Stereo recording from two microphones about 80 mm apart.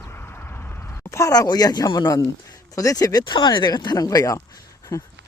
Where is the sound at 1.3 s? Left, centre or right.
Left.